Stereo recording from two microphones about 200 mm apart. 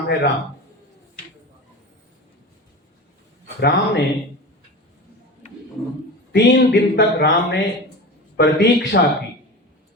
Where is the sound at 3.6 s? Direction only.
55° left (ahead or behind).